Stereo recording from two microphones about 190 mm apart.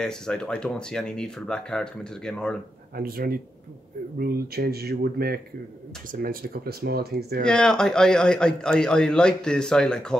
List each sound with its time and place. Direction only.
0.0 s speech: 5° left (ahead or behind)
3.0 s speech: 50° right (ahead or behind)
7.4 s speech: 5° left (ahead or behind)